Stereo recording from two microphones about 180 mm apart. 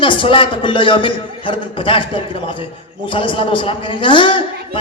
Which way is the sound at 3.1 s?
30° left (ahead or behind).